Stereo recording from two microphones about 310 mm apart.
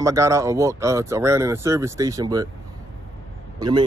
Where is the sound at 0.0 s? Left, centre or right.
Centre.